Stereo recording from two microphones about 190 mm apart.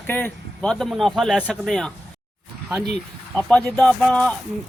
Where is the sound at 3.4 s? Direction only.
5° left (ahead or behind).